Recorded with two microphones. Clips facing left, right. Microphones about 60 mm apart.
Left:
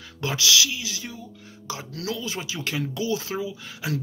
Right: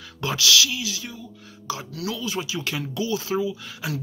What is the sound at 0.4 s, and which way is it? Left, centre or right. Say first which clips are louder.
Speech: right 2 dB; left.